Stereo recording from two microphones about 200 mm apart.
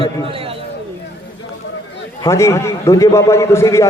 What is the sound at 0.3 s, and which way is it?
Speech, 30° right (ahead or behind).